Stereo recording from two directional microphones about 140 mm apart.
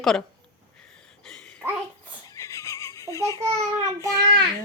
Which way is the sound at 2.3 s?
20° left (ahead or behind).